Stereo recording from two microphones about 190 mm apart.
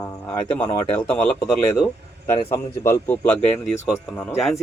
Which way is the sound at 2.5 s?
15° left (ahead or behind).